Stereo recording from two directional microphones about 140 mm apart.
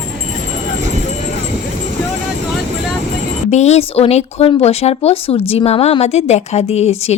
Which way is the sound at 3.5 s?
50° left (ahead or behind).